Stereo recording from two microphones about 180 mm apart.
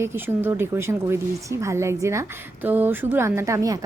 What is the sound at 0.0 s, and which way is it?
A woman's voice, 15° right (ahead or behind).